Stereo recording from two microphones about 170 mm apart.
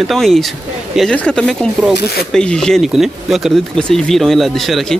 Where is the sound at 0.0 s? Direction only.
Centre (ahead or behind).